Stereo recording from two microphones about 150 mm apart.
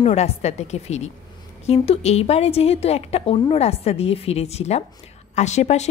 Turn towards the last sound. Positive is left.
turn(degrees=50)  # may be behind; listen again after turning